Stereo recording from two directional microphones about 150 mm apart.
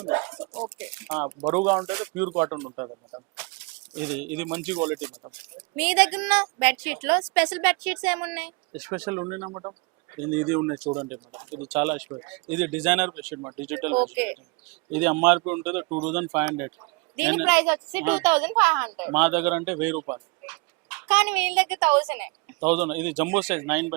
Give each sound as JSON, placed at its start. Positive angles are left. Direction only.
{"t": 0.8, "sound": "speech", "side_deg": -10}
{"t": 2.7, "sound": "speech", "side_deg": -25}
{"t": 3.9, "sound": "speech", "side_deg": -10}
{"t": 10.2, "sound": "speech", "side_deg": -10}